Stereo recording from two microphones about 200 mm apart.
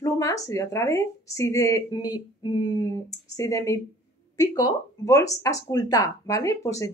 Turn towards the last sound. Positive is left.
turn(degrees=15)  # may be behind; listen again after turning